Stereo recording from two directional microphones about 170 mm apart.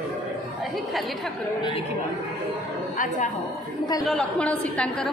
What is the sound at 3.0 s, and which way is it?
Speech, 50° left (ahead or behind).